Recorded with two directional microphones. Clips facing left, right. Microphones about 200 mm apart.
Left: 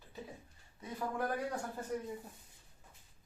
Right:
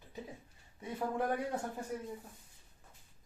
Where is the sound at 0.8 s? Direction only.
25° right (ahead or behind).